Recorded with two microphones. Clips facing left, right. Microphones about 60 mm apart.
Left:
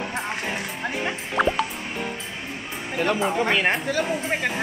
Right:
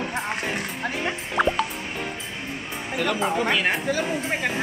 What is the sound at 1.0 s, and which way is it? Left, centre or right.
Music, centre.